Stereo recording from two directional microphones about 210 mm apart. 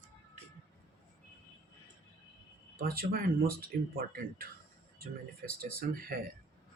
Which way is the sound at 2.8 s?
45° right (ahead or behind).